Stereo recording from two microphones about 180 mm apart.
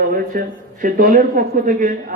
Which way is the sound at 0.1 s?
50° right (ahead or behind).